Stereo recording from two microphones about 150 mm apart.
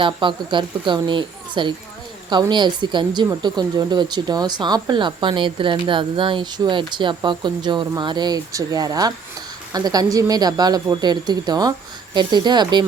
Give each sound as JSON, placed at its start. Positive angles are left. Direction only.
{"t": 0.0, "sound": "speech", "side_deg": -30}